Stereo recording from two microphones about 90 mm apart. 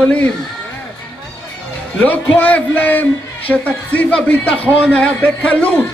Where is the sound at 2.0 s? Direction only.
15° left (ahead or behind).